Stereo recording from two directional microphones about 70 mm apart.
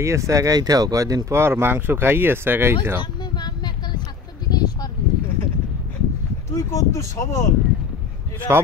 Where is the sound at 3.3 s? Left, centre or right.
Left.